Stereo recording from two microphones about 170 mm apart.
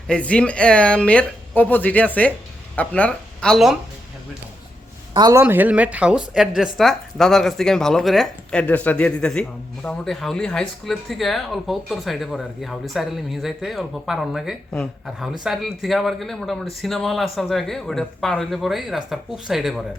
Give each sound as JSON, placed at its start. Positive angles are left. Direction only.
{"t": 0.1, "sound": "speech", "side_deg": 5}
{"t": 5.1, "sound": "a man's voice", "side_deg": -25}
{"t": 5.4, "sound": "speech", "side_deg": -10}